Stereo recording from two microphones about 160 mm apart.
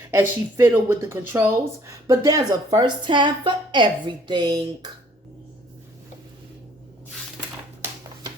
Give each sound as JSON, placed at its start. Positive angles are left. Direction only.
{"t": 0.1, "sound": "speech", "side_deg": -15}